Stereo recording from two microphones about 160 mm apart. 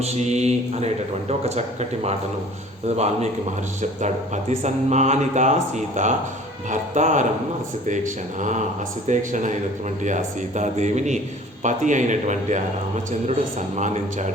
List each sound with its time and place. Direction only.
0.0 s speech: 45° right (ahead or behind)
13.7 s speech: 50° right (ahead or behind)